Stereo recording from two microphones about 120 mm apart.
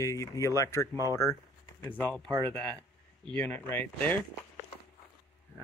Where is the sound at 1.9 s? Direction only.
15° left (ahead or behind).